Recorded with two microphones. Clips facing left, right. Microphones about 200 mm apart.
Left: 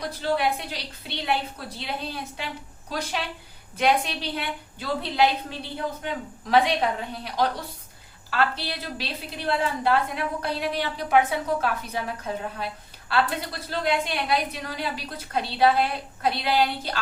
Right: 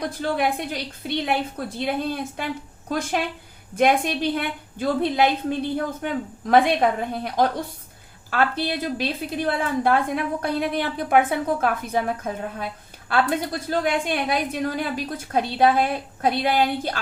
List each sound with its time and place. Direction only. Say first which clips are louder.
0.0 s a woman's voice: right 2 dB; 50° right (ahead or behind)